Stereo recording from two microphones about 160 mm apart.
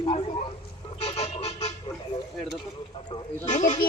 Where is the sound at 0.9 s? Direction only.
40° left (ahead or behind).